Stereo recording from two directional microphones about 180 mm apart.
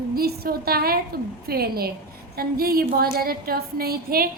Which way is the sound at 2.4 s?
55° right (ahead or behind).